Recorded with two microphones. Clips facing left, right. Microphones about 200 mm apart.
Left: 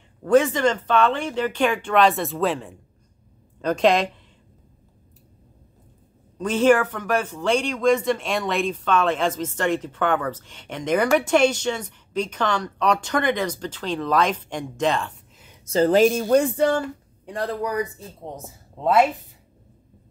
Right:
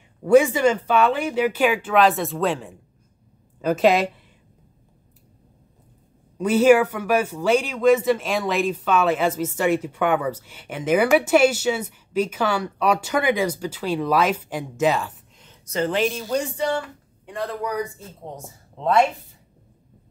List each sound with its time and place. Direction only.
0.2 s a woman's voice: 10° right (ahead or behind)
6.3 s speech: 10° right (ahead or behind)
15.6 s a woman's voice: 35° left (ahead or behind); by 16.8 s 50° left (ahead or behind)
17.4 s a woman's voice: centre (ahead or behind)